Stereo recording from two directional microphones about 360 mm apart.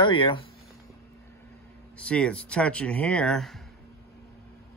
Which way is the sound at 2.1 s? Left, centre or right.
Centre.